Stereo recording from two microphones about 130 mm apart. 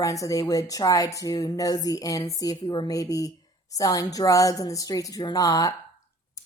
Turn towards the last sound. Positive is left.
turn(degrees=25)  # may be behind; listen again after turning